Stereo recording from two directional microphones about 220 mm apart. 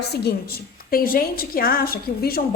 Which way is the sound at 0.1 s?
45° left (ahead or behind).